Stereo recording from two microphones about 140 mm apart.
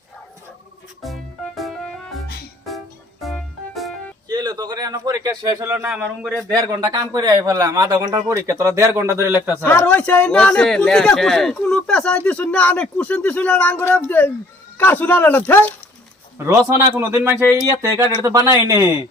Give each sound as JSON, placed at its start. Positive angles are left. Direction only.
{"t": 1.0, "sound": "music", "side_deg": 0}
{"t": 4.3, "sound": "a man's voice", "side_deg": -30}
{"t": 5.6, "sound": "a man's voice", "side_deg": -15}
{"t": 5.9, "sound": "a man's voice", "side_deg": -5}
{"t": 6.9, "sound": "speech", "side_deg": -30}
{"t": 9.6, "sound": "speech", "side_deg": 10}
{"t": 16.5, "sound": "speech", "side_deg": -20}